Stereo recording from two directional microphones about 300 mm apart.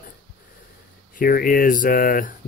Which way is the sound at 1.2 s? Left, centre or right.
Left.